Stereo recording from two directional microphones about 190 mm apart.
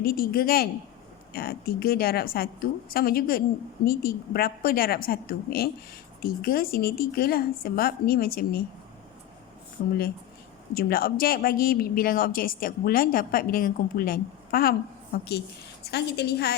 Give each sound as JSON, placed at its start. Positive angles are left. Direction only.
{"t": 0.0, "sound": "speech", "side_deg": 50}
{"t": 9.8, "sound": "a woman's voice", "side_deg": 60}
{"t": 10.8, "sound": "a woman's voice", "side_deg": 50}